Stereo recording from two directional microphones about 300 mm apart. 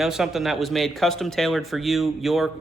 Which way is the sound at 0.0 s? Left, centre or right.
Centre.